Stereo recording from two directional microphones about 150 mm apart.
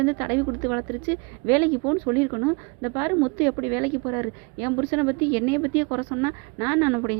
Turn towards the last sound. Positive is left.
turn(degrees=-15)  # may be behind; listen again after turning